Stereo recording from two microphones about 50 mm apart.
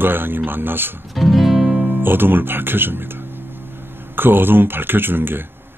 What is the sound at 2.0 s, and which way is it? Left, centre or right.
Speech, right.